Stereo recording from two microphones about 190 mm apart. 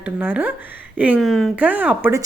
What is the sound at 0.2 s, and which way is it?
A woman's voice, 10° right (ahead or behind).